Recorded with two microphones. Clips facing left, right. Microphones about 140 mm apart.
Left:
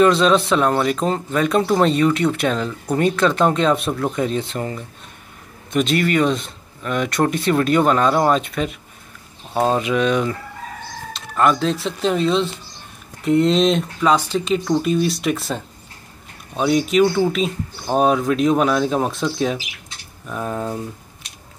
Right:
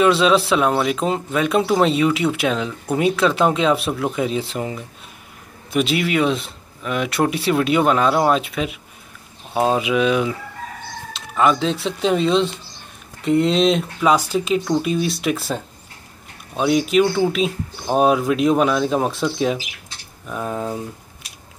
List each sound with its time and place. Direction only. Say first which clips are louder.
0.0 s speech: left 1 dB; 5° right (ahead or behind)